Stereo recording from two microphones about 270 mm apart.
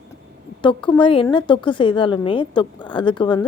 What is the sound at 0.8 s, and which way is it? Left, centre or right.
A woman's voice, centre.